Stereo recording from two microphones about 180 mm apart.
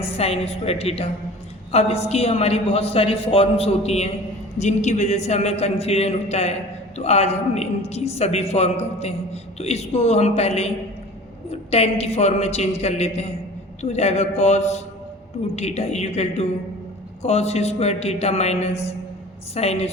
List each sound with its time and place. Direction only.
0.2 s a woman's voice: 35° left (ahead or behind)